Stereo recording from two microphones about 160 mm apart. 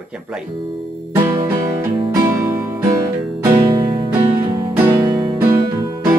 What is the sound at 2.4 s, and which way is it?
Music, 20° right (ahead or behind).